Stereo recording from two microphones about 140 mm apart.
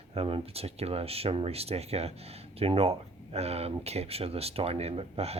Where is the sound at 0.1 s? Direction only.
45° right (ahead or behind).